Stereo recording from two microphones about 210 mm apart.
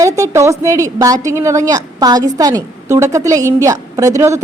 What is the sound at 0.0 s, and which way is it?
A woman's voice, 15° right (ahead or behind).